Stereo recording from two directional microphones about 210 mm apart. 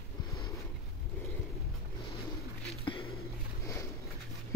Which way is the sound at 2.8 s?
25° left (ahead or behind).